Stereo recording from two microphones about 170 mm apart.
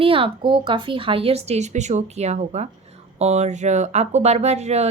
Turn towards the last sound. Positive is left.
turn(degrees=-40)  # may be behind; listen again after turning